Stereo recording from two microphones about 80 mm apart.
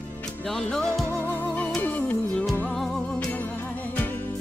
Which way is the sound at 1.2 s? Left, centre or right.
Left.